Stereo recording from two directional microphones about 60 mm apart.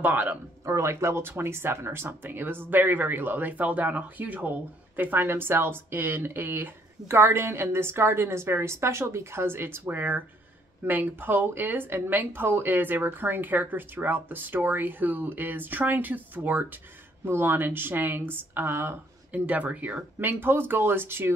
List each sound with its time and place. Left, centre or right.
0.0 s speech: right
0.7 s speech: right
19.3 s speech: right
20.2 s speech: right